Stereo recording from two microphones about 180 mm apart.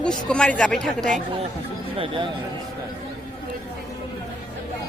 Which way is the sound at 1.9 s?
30° right (ahead or behind).